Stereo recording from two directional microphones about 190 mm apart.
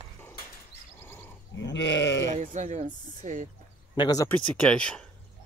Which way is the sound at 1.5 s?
70° left (ahead or behind).